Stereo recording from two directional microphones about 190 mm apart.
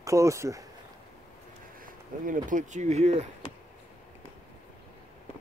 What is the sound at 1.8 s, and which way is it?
Speech, 45° right (ahead or behind).